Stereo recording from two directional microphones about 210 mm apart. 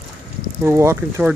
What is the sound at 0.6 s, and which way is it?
Speech, 15° right (ahead or behind).